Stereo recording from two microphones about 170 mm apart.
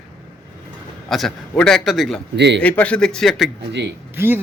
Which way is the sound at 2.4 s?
90° right.